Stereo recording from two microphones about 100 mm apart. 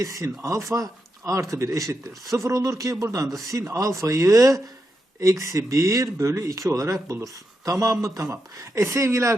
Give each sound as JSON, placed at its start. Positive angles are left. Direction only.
{"t": 0.0, "sound": "speech", "side_deg": -35}